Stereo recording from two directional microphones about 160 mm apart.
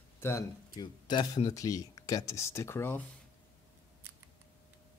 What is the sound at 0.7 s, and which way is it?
Speech, 25° left (ahead or behind).